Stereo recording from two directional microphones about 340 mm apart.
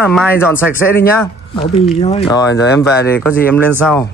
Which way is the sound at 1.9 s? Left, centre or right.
Centre.